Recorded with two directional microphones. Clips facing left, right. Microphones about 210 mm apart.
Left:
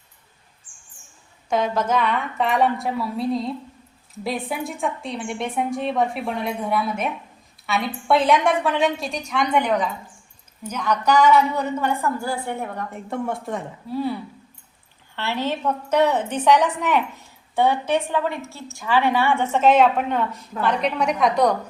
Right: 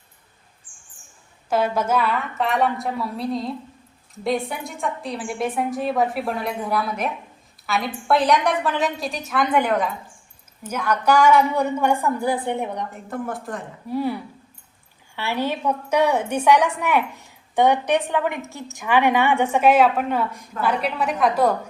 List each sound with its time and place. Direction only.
1.5 s a woman's voice: 5° right (ahead or behind)
12.9 s a woman's voice: centre (ahead or behind)
13.8 s a woman's voice: 10° right (ahead or behind)